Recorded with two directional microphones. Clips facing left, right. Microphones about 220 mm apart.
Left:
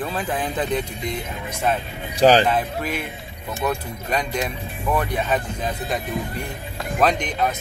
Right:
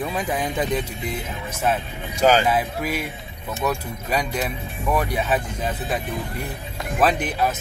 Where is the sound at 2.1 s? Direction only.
35° left (ahead or behind).